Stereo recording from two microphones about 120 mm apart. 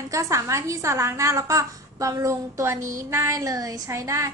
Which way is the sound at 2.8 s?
90° right.